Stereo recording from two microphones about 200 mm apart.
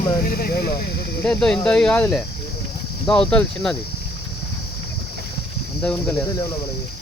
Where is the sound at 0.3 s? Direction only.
50° left (ahead or behind).